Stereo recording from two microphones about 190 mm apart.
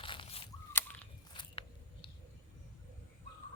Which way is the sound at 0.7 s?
10° left (ahead or behind).